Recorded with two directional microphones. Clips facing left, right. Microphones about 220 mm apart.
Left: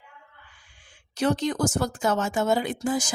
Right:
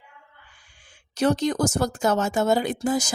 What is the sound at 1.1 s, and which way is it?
Speech, 40° right (ahead or behind).